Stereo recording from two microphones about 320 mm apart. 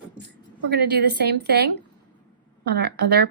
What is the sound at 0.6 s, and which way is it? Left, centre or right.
A woman's voice, right.